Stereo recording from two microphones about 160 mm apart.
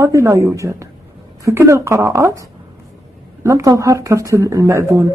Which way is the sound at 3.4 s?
20° right (ahead or behind).